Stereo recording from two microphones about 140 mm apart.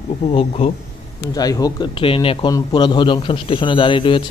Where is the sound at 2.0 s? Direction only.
40° left (ahead or behind).